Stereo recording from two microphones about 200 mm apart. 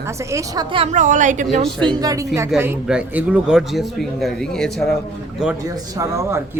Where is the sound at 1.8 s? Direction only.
15° right (ahead or behind).